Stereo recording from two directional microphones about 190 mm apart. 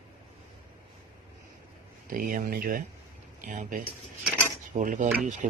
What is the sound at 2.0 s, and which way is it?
Speech, 45° right (ahead or behind).